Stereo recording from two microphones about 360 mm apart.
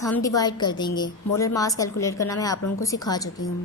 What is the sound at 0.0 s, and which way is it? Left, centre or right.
A woman's voice, centre.